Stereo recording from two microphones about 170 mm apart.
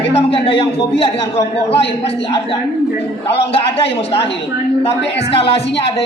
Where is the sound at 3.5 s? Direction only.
35° left (ahead or behind).